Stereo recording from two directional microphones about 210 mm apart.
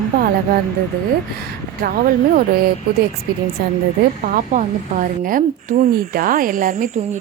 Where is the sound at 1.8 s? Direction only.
45° right (ahead or behind).